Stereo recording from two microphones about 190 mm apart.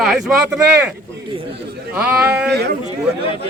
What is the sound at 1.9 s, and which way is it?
Speech, 5° right (ahead or behind).